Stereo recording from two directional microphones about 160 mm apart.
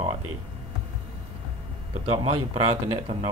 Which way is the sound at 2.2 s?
40° right (ahead or behind).